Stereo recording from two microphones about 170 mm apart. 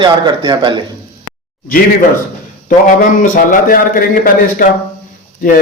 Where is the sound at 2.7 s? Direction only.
50° left (ahead or behind).